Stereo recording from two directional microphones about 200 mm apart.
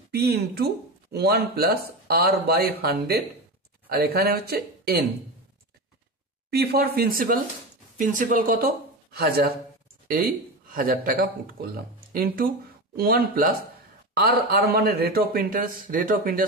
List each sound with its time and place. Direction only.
0.1 s speech: 50° right (ahead or behind)
6.5 s speech: 50° right (ahead or behind)
10.7 s speech: 45° right (ahead or behind)